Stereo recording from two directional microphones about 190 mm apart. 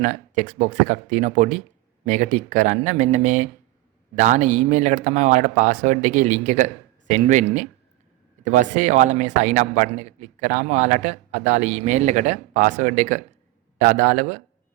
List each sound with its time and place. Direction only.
0.0 s speech: 40° right (ahead or behind)